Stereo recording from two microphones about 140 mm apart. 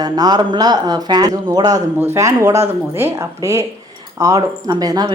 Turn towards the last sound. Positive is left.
turn(degrees=-30)  # may be behind; listen again after turning